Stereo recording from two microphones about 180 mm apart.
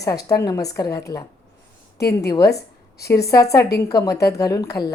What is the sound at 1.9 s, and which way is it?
Speech, 65° left (ahead or behind).